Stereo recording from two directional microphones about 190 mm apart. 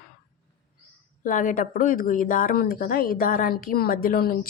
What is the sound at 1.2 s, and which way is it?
A woman's voice, 45° left (ahead or behind).